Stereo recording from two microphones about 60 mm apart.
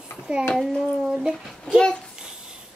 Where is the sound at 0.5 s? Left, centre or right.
Centre.